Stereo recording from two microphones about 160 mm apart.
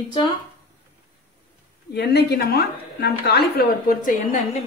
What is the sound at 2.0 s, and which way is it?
A woman's voice, 90° left.